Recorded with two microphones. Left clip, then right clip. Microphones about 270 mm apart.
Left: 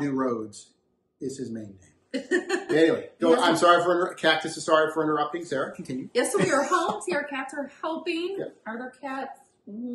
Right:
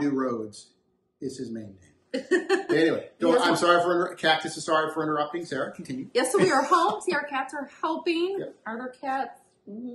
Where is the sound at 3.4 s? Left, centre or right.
Centre.